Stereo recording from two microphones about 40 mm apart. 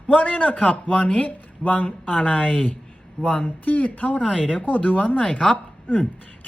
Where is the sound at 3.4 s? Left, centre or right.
Left.